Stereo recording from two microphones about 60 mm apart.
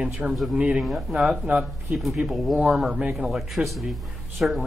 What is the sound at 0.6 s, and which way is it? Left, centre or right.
Speech, centre.